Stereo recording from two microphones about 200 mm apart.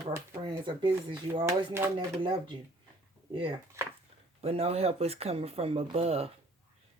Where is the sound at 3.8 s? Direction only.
15° right (ahead or behind).